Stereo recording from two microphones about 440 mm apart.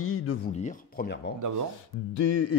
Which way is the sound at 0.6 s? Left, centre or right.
Centre.